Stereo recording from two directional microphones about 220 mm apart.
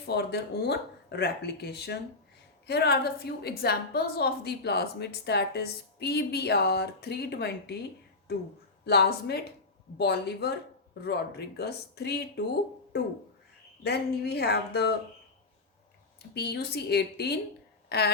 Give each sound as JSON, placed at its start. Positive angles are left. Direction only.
{"t": 0.0, "sound": "a woman's voice", "side_deg": 50}
{"t": 13.8, "sound": "a woman's voice", "side_deg": 45}
{"t": 16.3, "sound": "a woman's voice", "side_deg": 45}